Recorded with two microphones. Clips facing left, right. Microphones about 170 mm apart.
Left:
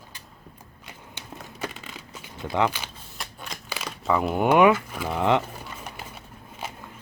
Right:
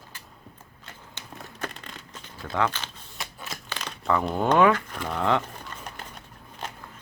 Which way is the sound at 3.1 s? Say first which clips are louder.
Right 1 dB; centre (ahead or behind).